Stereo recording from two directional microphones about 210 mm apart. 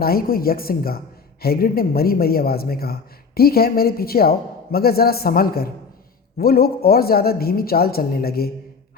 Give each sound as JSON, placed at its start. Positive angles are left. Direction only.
{"t": 0.0, "sound": "a man's voice", "side_deg": 45}